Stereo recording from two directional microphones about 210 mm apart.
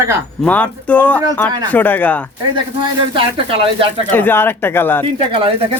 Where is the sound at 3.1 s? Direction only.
25° right (ahead or behind).